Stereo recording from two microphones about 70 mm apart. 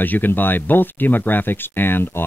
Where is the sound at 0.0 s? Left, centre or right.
Left.